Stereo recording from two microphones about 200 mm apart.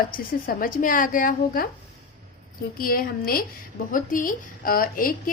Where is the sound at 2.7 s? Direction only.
45° left (ahead or behind).